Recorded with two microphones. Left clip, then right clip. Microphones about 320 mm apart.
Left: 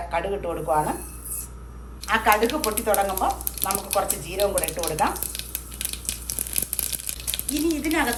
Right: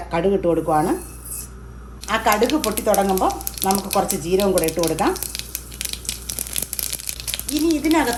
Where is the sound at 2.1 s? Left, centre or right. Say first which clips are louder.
Right 1 dB; centre.